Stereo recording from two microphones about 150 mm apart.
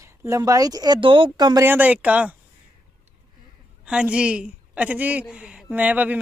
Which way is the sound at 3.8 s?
5° right (ahead or behind).